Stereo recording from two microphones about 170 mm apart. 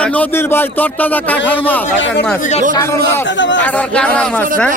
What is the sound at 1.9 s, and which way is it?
Speech, 90° left.